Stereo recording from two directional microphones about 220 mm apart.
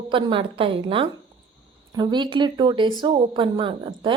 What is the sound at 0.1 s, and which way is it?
Speech, 25° right (ahead or behind).